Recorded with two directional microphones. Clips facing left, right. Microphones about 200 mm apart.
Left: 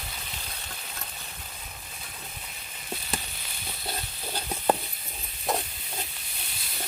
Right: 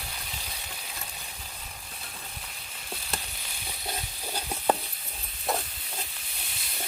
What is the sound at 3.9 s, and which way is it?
Stir, 10° right (ahead or behind).